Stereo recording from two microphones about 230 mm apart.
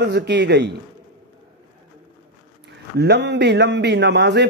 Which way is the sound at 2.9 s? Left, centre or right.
Right.